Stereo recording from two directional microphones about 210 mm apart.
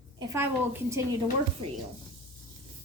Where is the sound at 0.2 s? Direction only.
15° right (ahead or behind).